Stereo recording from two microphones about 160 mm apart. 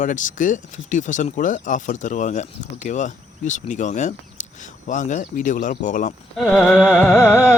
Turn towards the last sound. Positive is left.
turn(degrees=15)  # may be behind; listen again after turning